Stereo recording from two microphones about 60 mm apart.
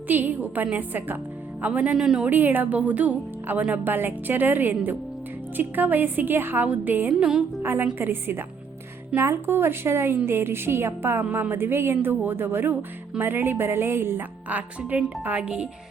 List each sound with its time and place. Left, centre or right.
0.1 s speech: right
2.0 s a woman's voice: centre
2.3 s speech: right
7.1 s a woman's voice: centre
7.6 s a woman's voice: right
14.5 s speech: right